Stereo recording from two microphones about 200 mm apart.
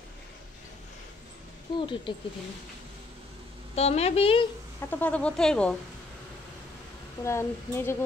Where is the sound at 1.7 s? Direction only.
25° left (ahead or behind).